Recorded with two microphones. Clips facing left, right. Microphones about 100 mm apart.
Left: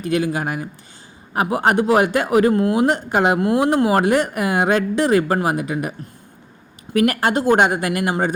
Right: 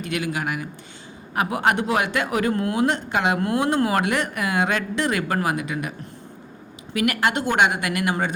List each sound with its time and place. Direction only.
0.0 s a man's voice: 35° left (ahead or behind)
6.9 s a man's voice: 40° left (ahead or behind)